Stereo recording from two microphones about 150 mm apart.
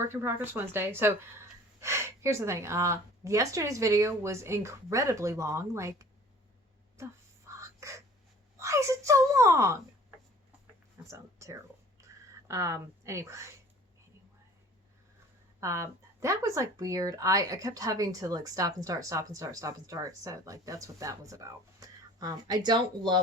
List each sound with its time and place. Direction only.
0.0 s speech: 15° right (ahead or behind)
6.9 s crow: 20° right (ahead or behind)
8.5 s speech: 20° right (ahead or behind)
10.9 s a sound: 20° right (ahead or behind)
15.6 s speech: 20° right (ahead or behind)